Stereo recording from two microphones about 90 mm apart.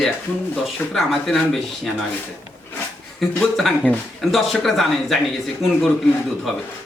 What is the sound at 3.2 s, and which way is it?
Speech, centre (ahead or behind).